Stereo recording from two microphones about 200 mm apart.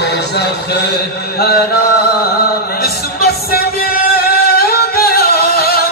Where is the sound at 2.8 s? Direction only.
50° left (ahead or behind).